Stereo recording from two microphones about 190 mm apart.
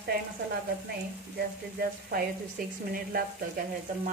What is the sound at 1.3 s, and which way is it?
Speech, 50° right (ahead or behind).